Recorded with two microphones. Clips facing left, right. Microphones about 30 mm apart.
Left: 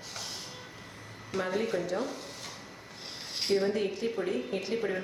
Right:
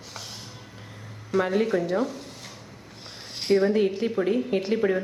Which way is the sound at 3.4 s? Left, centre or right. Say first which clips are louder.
Right 6 dB; centre.